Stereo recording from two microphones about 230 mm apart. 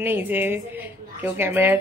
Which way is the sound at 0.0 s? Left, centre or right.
Centre.